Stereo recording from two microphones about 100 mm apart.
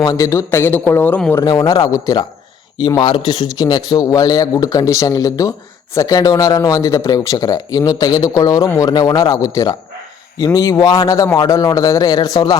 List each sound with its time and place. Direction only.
0.0 s a man's voice: 35° left (ahead or behind); by 1.2 s 20° left (ahead or behind)
1.5 s a man's voice: 35° left (ahead or behind)